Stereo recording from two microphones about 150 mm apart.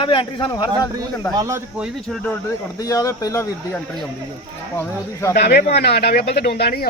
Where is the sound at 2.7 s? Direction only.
25° left (ahead or behind).